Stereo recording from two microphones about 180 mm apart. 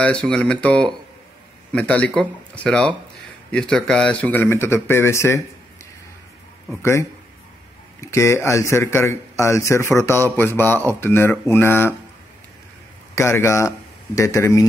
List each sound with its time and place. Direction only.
0.0 s speech: 5° left (ahead or behind)
6.8 s speech: 15° left (ahead or behind)
13.1 s speech: 15° left (ahead or behind)